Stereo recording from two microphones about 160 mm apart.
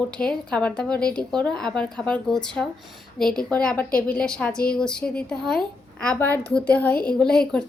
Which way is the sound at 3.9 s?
65° left (ahead or behind).